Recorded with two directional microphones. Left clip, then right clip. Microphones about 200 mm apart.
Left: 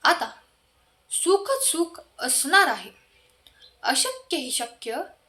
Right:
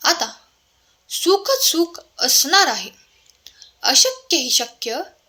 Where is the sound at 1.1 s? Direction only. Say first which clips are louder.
Right 5 dB; 35° right (ahead or behind).